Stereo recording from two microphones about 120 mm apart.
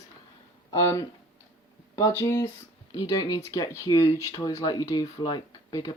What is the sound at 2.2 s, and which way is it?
Speech, 25° left (ahead or behind).